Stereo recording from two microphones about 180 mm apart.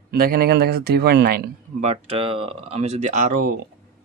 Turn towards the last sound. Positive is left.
turn(degrees=-45)  # may be behind; listen again after turning